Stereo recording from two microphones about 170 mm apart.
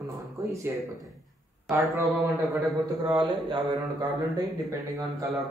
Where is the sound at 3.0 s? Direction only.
25° right (ahead or behind).